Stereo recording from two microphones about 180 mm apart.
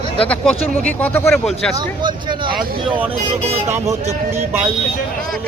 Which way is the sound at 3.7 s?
15° right (ahead or behind).